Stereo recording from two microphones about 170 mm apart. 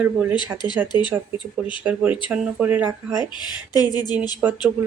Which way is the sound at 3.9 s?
25° left (ahead or behind).